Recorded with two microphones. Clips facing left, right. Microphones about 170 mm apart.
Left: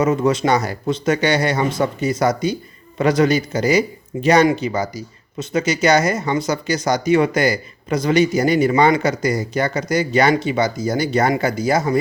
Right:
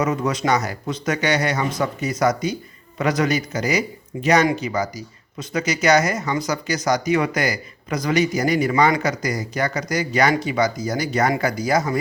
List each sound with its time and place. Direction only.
0.0 s a man's voice: 25° left (ahead or behind)